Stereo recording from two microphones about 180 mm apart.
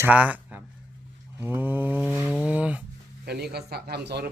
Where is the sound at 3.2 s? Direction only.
65° right (ahead or behind).